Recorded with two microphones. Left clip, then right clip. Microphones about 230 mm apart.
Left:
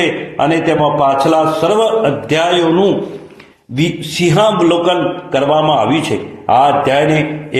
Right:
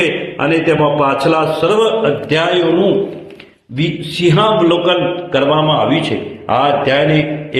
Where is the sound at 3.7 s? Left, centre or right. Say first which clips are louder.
Left 2 dB; left.